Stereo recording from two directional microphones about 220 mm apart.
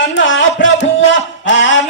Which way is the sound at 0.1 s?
60° left (ahead or behind).